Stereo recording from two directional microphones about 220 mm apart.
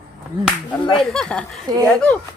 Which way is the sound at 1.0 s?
Centre (ahead or behind).